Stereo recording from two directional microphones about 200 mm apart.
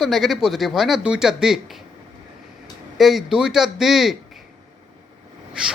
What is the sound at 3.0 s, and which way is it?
Speech, centre (ahead or behind).